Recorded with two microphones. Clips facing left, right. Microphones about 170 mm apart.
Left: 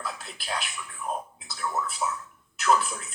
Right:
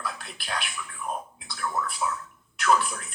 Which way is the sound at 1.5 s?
25° left (ahead or behind).